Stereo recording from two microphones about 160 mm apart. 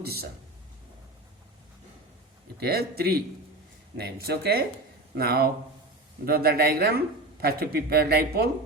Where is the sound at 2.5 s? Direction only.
75° right (ahead or behind).